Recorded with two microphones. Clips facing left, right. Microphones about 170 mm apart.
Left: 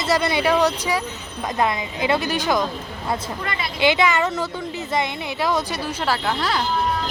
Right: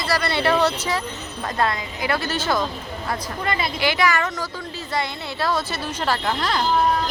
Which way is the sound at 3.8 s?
20° left (ahead or behind).